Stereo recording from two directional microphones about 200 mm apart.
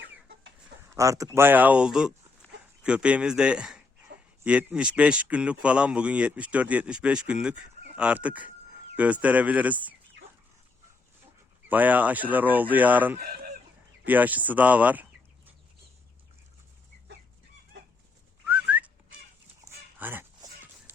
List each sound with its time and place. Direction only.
0.9 s speech: 15° right (ahead or behind)
2.4 s dog: 10° left (ahead or behind)
2.8 s speech: 5° right (ahead or behind)
11.7 s speech: 10° right (ahead or behind)
13.1 s speech: 50° right (ahead or behind)
14.0 s speech: 10° right (ahead or behind)
18.4 s whistling: 10° right (ahead or behind)
20.0 s goose: 10° right (ahead or behind)